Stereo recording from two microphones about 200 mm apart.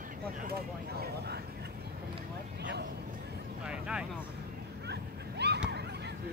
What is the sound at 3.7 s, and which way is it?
Speech, 5° right (ahead or behind).